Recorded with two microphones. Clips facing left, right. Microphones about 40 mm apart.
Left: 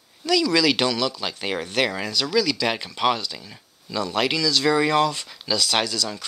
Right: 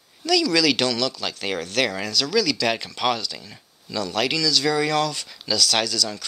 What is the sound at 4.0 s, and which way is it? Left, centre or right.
Speech, centre.